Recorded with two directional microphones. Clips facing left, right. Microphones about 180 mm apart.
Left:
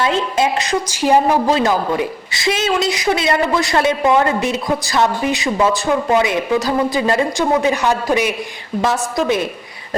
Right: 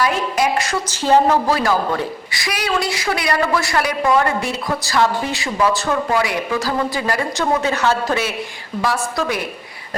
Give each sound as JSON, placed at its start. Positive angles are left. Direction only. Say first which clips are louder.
{"t": 0.0, "sound": "a woman's voice", "louder": "left 2 dB", "side_deg": 25}